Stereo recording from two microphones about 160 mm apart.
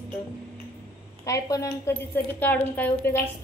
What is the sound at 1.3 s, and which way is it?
A woman's voice, 20° left (ahead or behind).